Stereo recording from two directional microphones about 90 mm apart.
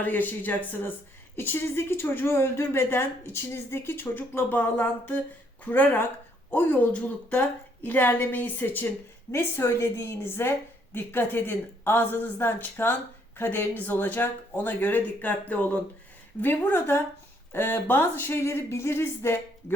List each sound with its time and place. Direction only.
0.0 s a woman's voice: 20° left (ahead or behind)